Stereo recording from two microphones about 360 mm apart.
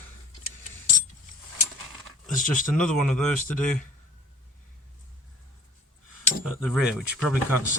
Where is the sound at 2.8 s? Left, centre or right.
Centre.